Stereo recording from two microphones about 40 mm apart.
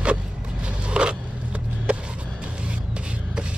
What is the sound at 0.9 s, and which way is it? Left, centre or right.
Vehicle, right.